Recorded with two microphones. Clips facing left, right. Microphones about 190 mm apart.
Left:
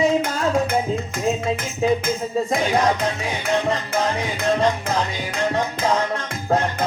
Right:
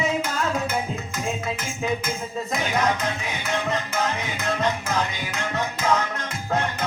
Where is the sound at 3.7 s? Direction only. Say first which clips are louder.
Left 4 dB; 30° left (ahead or behind).